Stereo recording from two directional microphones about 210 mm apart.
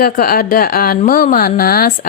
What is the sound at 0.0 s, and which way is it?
A woman's voice, 45° left (ahead or behind).